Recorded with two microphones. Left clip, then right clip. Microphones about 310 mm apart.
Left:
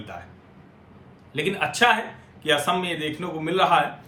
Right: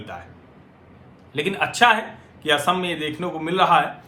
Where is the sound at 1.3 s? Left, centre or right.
Centre.